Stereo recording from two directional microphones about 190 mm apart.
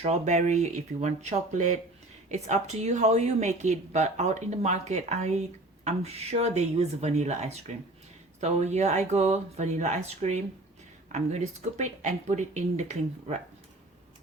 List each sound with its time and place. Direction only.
0.0 s speech: 35° right (ahead or behind)